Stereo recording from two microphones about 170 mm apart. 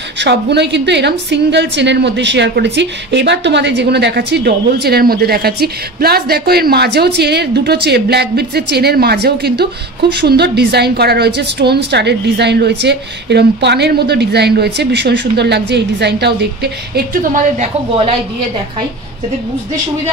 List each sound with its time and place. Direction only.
0.2 s a woman's voice: 85° right; by 17.4 s 60° right (ahead or behind)
17.6 s a woman's voice: 35° right (ahead or behind)